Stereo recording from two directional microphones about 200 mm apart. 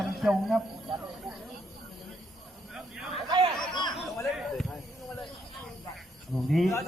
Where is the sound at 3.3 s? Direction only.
20° right (ahead or behind).